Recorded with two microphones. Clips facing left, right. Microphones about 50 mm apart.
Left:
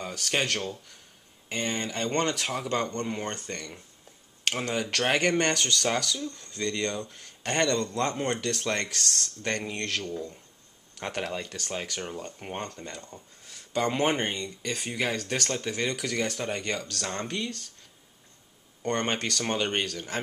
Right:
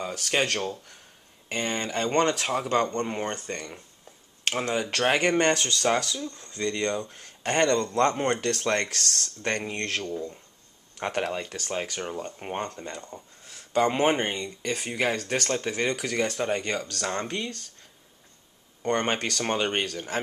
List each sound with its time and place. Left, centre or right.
0.4 s speech: right
7.1 s speech: right
13.5 s a sound: right
13.8 s speech: right
18.8 s speech: right
19.1 s speech: right